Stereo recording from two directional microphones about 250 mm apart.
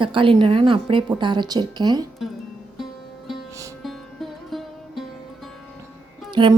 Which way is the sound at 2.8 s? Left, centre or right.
Centre.